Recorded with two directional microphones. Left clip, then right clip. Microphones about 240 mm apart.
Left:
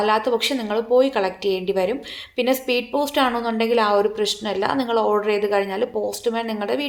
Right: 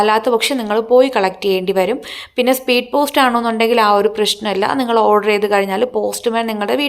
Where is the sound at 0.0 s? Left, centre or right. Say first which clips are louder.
Right 6 dB; centre.